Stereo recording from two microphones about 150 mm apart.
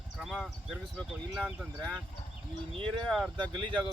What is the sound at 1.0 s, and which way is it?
Speech, 5° left (ahead or behind).